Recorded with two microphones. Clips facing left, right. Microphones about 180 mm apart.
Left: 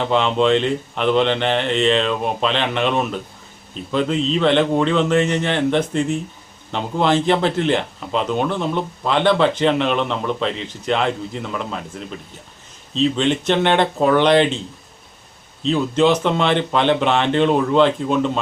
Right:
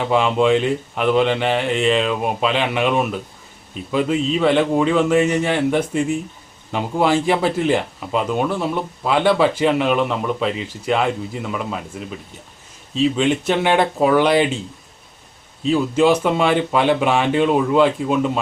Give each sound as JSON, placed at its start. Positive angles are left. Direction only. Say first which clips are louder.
{"t": 0.0, "sound": "speech", "louder": "right 1 dB", "side_deg": -5}
{"t": 15.6, "sound": "speech", "louder": "right 1 dB", "side_deg": -10}